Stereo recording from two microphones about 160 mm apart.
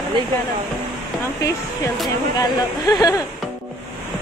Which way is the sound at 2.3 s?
25° left (ahead or behind).